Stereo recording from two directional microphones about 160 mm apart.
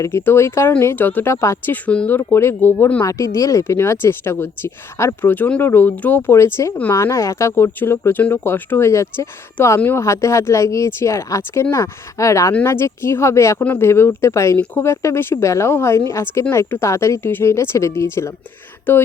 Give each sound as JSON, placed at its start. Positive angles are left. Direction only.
{"t": 0.0, "sound": "speech", "side_deg": 15}